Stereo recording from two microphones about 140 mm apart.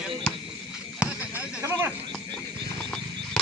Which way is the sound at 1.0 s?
10° right (ahead or behind).